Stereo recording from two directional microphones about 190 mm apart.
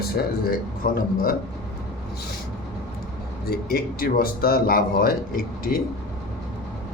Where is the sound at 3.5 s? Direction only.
55° left (ahead or behind).